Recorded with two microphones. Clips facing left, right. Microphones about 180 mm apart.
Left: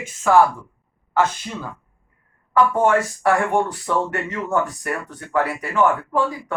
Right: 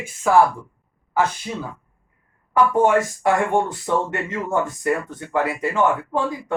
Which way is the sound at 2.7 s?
20° right (ahead or behind).